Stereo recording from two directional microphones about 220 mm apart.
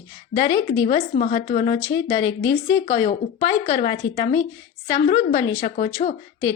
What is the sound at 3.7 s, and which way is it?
A woman's voice, 25° left (ahead or behind).